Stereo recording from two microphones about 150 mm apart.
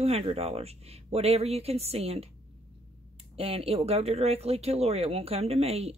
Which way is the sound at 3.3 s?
40° right (ahead or behind).